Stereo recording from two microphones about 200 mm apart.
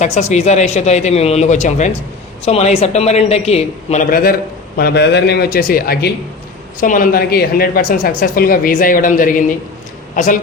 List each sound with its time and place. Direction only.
0.0 s speech: 35° left (ahead or behind)
4.1 s speech: 45° left (ahead or behind)